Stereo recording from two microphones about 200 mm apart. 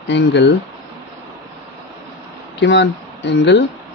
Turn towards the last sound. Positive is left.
turn(degrees=60)  # may be behind; listen again after turning